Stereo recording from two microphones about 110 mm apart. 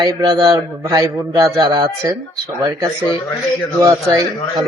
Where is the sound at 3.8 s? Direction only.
30° right (ahead or behind).